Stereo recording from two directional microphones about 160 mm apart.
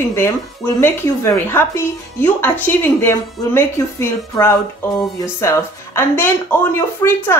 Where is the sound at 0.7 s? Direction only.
15° left (ahead or behind).